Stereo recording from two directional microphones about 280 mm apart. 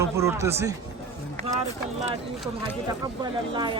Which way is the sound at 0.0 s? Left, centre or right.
Centre.